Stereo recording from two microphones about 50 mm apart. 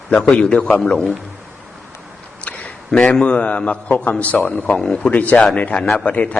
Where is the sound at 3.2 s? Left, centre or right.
Left.